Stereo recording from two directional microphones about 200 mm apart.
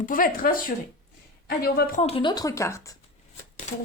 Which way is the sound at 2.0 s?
25° left (ahead or behind).